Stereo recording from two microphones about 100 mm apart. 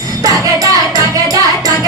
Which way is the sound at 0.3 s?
35° right (ahead or behind).